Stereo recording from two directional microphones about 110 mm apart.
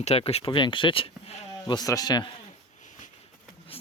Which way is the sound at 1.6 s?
40° left (ahead or behind).